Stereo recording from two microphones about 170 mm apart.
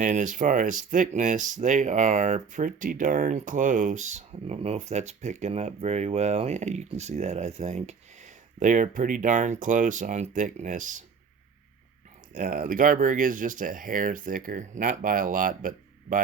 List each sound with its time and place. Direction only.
0.0 s speech: 45° right (ahead or behind)
12.3 s speech: 50° right (ahead or behind)